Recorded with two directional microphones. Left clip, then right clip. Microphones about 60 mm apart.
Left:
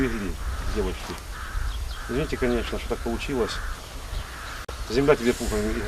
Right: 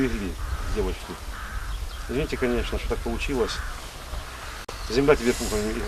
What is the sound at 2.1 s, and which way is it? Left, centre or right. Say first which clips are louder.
Speech: even; centre.